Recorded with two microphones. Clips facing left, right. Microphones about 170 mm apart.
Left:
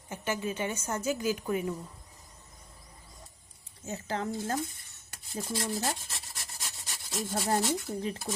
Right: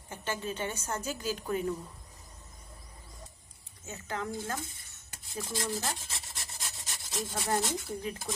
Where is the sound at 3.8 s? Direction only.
30° left (ahead or behind).